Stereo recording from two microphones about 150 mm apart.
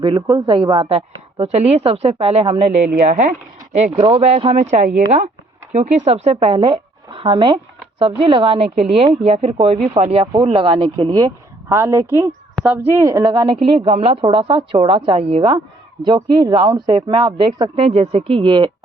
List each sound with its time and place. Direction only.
0.0 s speech: 30° right (ahead or behind)
3.1 s speech: 60° right (ahead or behind)
3.9 s a woman's voice: 35° right (ahead or behind)
17.8 s speech: 40° right (ahead or behind)